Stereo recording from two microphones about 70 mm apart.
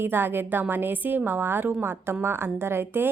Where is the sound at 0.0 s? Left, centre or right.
Right.